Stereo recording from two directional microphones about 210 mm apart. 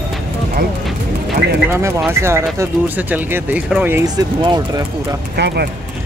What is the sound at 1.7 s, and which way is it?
Speech, 15° right (ahead or behind).